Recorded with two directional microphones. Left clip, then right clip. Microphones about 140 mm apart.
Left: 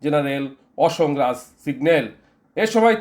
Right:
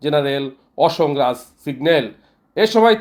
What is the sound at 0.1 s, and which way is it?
Speech, 30° right (ahead or behind).